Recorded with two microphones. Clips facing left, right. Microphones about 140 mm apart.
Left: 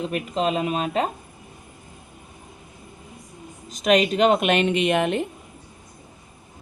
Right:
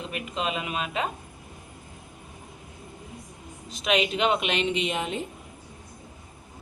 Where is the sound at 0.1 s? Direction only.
40° left (ahead or behind).